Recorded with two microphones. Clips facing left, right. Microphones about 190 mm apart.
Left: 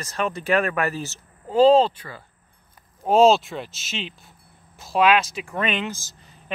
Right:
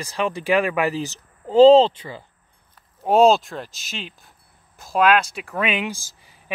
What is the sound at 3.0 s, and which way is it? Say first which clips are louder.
Speech: right 1 dB; centre (ahead or behind).